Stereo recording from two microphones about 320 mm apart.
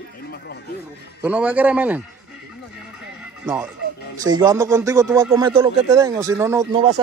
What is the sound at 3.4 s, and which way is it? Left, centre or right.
Speech, centre.